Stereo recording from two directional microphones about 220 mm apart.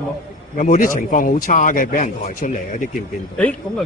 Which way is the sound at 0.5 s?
35° left (ahead or behind).